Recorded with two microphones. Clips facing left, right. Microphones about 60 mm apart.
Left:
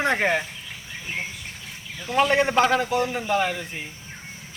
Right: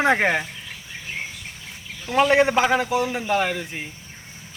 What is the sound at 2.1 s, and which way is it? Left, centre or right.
A man's voice, centre.